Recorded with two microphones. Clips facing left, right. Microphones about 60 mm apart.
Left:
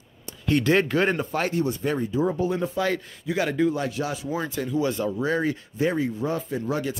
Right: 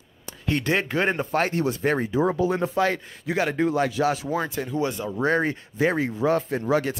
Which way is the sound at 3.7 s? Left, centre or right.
Right.